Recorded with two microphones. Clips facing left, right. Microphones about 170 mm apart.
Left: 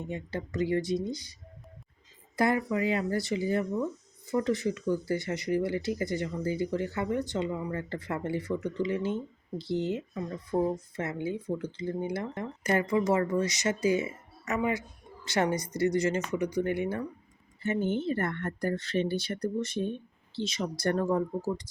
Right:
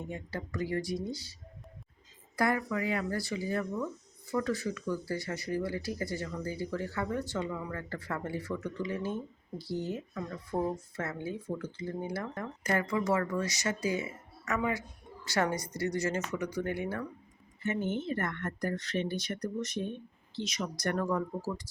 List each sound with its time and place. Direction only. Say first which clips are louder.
0.1 s speech: left 4 dB; 20° left (ahead or behind)
10.5 s speech: left 4 dB; 5° left (ahead or behind)
10.9 s speech: left 4 dB; 20° left (ahead or behind)
17.6 s speech: left 4 dB; 30° left (ahead or behind)